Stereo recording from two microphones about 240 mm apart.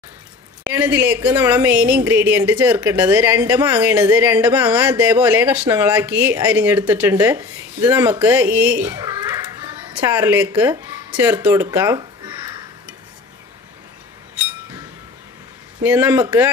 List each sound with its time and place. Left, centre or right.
0.7 s speech: centre
15.8 s speech: centre